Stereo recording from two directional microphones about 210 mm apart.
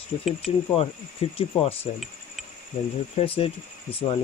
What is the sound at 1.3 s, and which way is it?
Speech, 25° left (ahead or behind).